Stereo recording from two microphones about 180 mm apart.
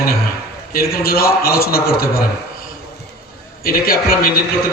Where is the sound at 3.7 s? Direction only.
55° left (ahead or behind).